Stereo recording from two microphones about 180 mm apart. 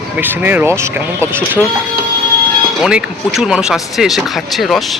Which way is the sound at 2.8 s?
5° right (ahead or behind).